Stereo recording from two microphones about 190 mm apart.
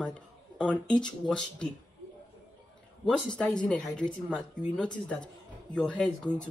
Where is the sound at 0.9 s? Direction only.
25° left (ahead or behind).